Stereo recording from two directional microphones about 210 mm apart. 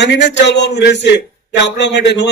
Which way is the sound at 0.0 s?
55° left (ahead or behind).